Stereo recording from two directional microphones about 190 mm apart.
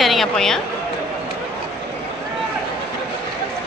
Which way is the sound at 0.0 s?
Centre (ahead or behind).